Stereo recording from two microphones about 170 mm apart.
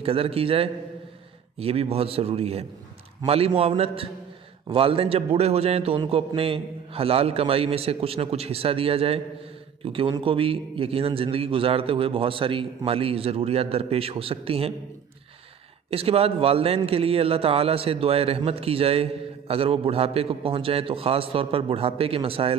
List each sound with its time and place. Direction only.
0.0 s a man's voice: 35° right (ahead or behind)
15.9 s a man's voice: 35° right (ahead or behind)